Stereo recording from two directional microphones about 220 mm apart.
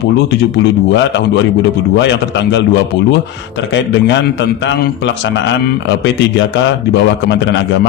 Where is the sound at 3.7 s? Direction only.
55° left (ahead or behind).